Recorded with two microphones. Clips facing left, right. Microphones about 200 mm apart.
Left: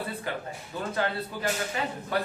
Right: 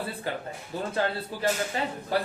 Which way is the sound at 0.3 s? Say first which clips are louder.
Right 1 dB; 30° right (ahead or behind).